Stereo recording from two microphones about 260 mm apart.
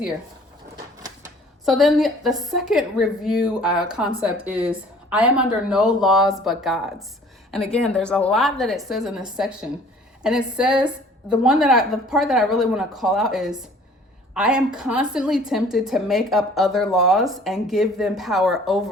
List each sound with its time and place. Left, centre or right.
1.6 s a woman's voice: centre